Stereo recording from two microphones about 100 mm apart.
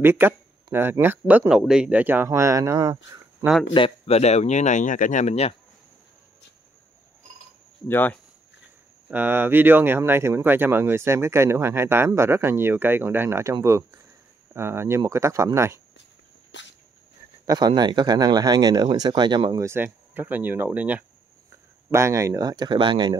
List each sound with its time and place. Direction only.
0.0 s speech: 25° right (ahead or behind)
1.5 s speech: 5° right (ahead or behind)
2.2 s speech: 30° right (ahead or behind)
3.7 s speech: 70° left (ahead or behind); by 4.5 s 90° left
7.9 s speech: 20° left (ahead or behind)
9.1 s speech: 20° right (ahead or behind)
17.5 s speech: 45° right (ahead or behind)
19.6 s speech: 20° right (ahead or behind)
21.9 s speech: 30° right (ahead or behind); by 23.1 s 50° right (ahead or behind)